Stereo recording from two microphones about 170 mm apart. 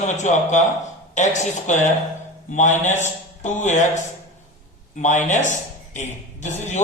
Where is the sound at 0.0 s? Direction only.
45° left (ahead or behind).